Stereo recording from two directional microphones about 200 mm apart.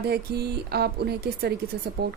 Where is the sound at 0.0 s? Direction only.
55° right (ahead or behind).